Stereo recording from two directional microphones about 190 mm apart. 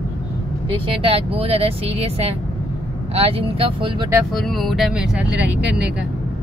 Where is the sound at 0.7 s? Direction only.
30° right (ahead or behind).